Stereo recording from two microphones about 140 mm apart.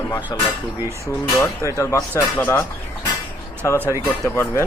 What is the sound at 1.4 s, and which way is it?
Speech, 20° left (ahead or behind).